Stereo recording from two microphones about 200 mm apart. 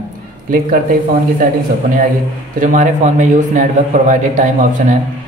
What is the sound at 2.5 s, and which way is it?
A man's voice, 40° right (ahead or behind).